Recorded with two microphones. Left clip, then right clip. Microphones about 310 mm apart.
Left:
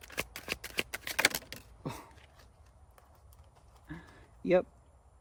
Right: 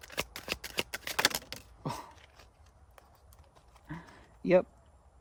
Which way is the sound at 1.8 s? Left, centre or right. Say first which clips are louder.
Right 5 dB; right.